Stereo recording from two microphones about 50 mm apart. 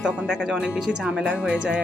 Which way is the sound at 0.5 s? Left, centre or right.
Right.